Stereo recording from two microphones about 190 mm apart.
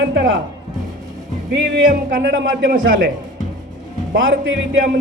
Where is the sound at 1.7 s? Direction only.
65° right (ahead or behind).